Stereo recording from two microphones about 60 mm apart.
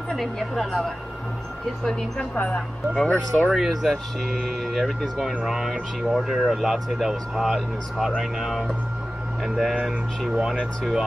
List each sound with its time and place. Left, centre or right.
0.1 s speech: centre; by 2.6 s left
2.9 s speech: centre
3.4 s speech: centre
10.8 s speech: centre